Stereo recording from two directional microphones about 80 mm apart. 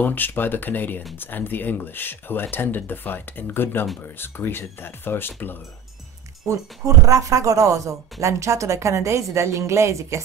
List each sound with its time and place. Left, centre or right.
0.0 s speech: left
7.1 s a woman's voice: right